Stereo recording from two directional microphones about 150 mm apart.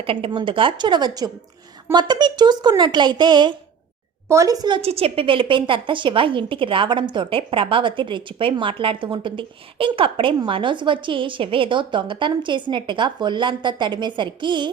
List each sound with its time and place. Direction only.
0.0 s a woman's voice: 35° right (ahead or behind)
4.8 s a woman's voice: 40° right (ahead or behind)